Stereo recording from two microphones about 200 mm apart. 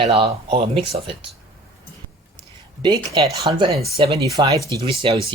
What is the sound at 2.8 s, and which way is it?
Speech, 25° right (ahead or behind).